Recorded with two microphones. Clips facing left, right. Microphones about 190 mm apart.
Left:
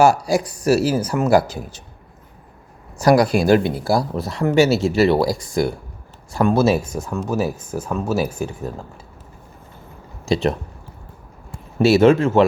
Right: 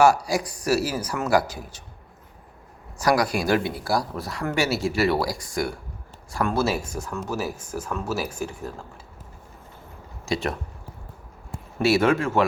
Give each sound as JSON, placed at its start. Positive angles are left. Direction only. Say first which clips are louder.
{"t": 0.0, "sound": "speech", "louder": "left 4 dB", "side_deg": 25}
{"t": 3.0, "sound": "speech", "louder": "left 7 dB", "side_deg": 25}
{"t": 10.2, "sound": "speech", "louder": "left 7 dB", "side_deg": 25}
{"t": 11.8, "sound": "speech", "louder": "left 7 dB", "side_deg": 25}